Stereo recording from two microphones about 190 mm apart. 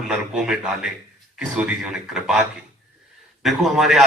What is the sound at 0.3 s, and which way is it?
A man's voice, 5° right (ahead or behind).